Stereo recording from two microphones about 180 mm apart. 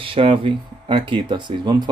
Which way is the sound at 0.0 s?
30° right (ahead or behind).